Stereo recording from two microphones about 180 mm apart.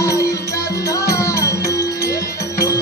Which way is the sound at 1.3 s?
15° left (ahead or behind).